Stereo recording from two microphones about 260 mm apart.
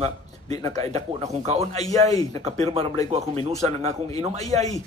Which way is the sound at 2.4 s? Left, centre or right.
Right.